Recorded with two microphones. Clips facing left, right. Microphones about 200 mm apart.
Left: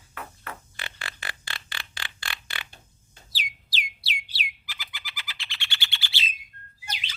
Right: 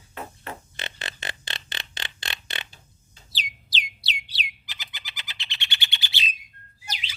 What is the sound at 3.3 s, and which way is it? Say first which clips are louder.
Bird: right 2 dB; 20° right (ahead or behind).